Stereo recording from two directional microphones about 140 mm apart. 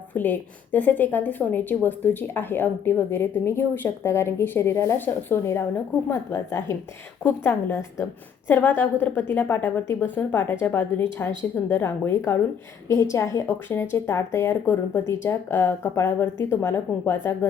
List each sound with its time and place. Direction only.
0.1 s a woman's voice: 10° left (ahead or behind)